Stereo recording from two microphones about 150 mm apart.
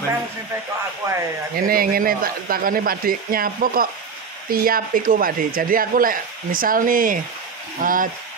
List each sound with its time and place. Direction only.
1.5 s speech: 75° right (ahead or behind)